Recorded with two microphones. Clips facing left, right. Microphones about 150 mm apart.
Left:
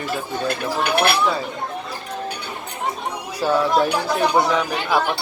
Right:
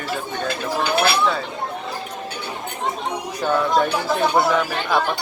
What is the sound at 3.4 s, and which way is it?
Speech, 5° left (ahead or behind).